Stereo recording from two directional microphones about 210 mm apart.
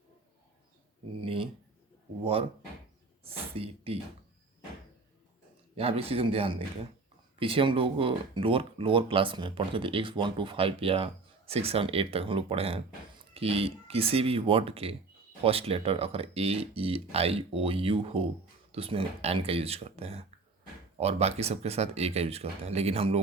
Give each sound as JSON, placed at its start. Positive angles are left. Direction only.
{"t": 1.2, "sound": "speech", "side_deg": -25}
{"t": 3.2, "sound": "a sound", "side_deg": -25}
{"t": 5.7, "sound": "speech", "side_deg": -25}